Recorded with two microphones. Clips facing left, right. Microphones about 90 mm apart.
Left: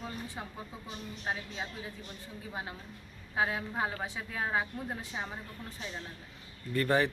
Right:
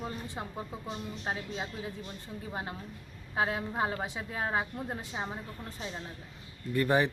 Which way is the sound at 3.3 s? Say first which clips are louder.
Right 1 dB; 30° right (ahead or behind).